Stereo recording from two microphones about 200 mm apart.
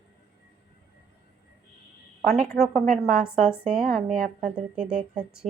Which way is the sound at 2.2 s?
5° right (ahead or behind).